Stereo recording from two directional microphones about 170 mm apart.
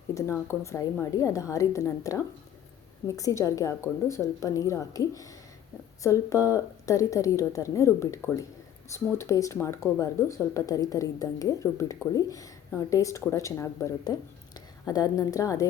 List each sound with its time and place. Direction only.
0.1 s speech: 20° left (ahead or behind)